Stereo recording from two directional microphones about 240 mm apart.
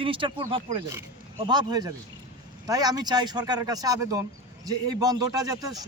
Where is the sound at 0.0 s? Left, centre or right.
Right.